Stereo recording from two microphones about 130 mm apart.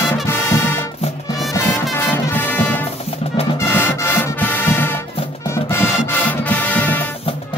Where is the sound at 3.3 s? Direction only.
45° left (ahead or behind).